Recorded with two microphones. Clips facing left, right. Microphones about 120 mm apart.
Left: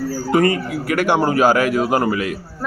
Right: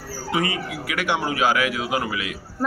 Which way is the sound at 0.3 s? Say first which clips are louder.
Left 8 dB; 50° left (ahead or behind).